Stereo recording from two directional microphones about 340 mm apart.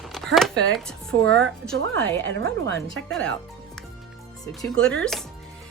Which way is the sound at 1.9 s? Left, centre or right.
Right.